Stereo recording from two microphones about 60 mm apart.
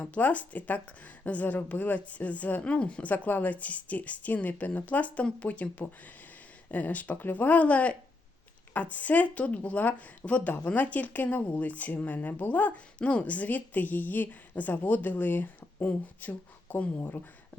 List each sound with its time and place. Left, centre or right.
0.0 s a woman's voice: left